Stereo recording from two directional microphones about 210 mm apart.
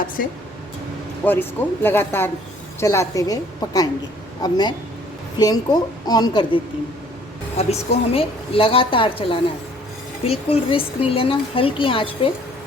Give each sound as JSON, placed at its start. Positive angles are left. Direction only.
{"t": 0.2, "sound": "speech", "side_deg": 45}
{"t": 1.2, "sound": "speech", "side_deg": 10}
{"t": 7.6, "sound": "speech", "side_deg": 30}